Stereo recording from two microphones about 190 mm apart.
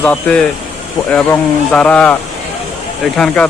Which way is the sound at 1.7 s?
5° left (ahead or behind).